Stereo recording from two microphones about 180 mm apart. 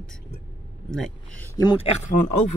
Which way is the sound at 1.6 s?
25° left (ahead or behind).